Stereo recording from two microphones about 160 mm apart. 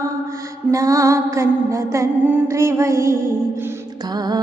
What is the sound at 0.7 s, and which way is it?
Music, 20° right (ahead or behind).